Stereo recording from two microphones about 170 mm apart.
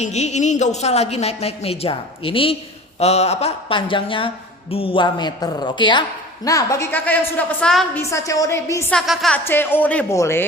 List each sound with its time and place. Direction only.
0.0 s a woman's voice: 40° left (ahead or behind); by 7.9 s 5° left (ahead or behind)
7.9 s a woman's voice: 20° left (ahead or behind)
9.0 s music: centre (ahead or behind)
9.4 s a woman's voice: 15° left (ahead or behind)